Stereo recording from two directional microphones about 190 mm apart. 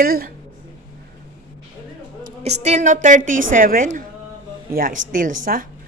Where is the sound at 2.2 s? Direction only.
35° right (ahead or behind).